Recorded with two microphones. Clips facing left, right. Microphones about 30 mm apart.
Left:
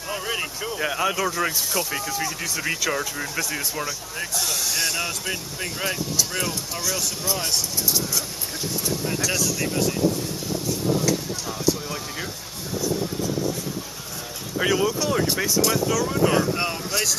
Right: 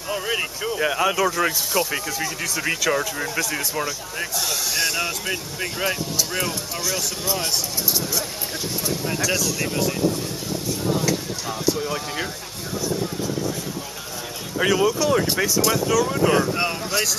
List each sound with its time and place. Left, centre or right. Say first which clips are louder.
0.1 s speech: right 3 dB; centre
11.1 s speech: even; centre
14.6 s speech: right 3 dB; centre